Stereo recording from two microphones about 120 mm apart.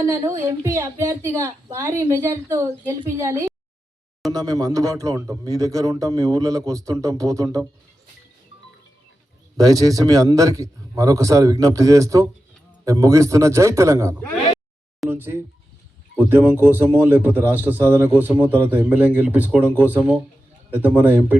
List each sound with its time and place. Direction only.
0.4 s a man's voice: 25° right (ahead or behind)
9.6 s a man's voice: 30° right (ahead or behind)
15.1 s a sound: 20° right (ahead or behind)
16.1 s a man's voice: 20° right (ahead or behind)